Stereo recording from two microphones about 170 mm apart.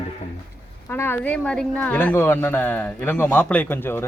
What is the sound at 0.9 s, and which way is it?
A woman's voice, 10° left (ahead or behind).